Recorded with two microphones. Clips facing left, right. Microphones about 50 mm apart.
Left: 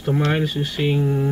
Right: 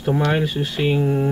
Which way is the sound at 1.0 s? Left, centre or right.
Centre.